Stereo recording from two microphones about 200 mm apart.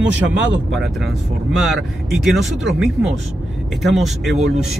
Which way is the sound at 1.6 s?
Centre (ahead or behind).